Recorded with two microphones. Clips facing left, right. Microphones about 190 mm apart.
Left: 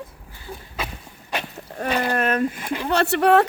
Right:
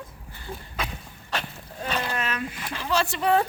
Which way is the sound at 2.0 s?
55° left (ahead or behind).